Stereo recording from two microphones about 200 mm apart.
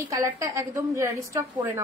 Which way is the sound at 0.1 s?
15° right (ahead or behind).